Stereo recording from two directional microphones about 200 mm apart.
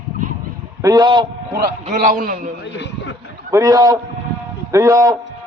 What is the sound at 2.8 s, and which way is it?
Speech, 60° left (ahead or behind).